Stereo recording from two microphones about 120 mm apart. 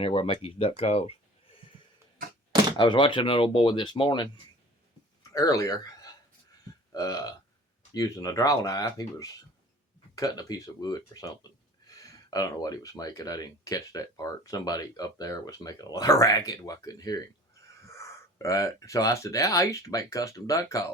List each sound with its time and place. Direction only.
0.0 s speech: 50° left (ahead or behind)
2.7 s speech: 40° left (ahead or behind)
5.3 s speech: 30° left (ahead or behind)